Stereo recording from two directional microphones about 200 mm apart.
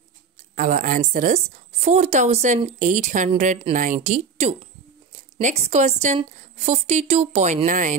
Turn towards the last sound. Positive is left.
turn(degrees=-40)  # may be behind; listen again after turning